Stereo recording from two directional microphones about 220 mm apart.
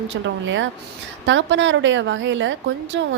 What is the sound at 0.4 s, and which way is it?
A woman's voice, 60° right (ahead or behind).